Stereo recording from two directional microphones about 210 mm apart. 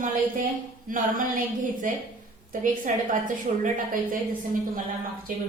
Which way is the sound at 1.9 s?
40° right (ahead or behind).